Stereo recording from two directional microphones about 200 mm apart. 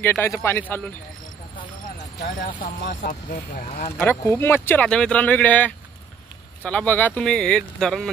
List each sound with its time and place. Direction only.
0.0 s speech: 10° left (ahead or behind)
2.4 s speech: 45° left (ahead or behind)
4.0 s speech: 10° left (ahead or behind)